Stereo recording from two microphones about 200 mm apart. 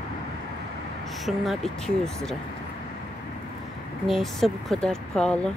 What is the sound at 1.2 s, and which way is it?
Speech, centre (ahead or behind).